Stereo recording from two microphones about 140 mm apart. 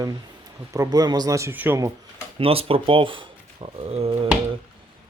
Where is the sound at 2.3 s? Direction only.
40° right (ahead or behind).